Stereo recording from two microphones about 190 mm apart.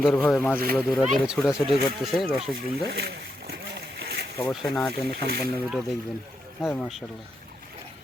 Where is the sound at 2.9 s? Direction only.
60° right (ahead or behind).